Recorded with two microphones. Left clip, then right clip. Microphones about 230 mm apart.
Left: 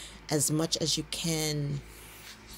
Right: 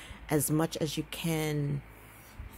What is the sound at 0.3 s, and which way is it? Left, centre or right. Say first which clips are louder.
Speech: even; centre.